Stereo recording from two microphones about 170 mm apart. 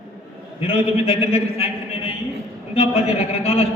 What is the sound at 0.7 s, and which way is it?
A man's voice, 35° left (ahead or behind).